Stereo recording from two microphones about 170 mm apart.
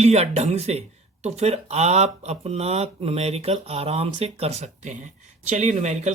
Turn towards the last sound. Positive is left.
turn(degrees=-45)  # may be behind; listen again after turning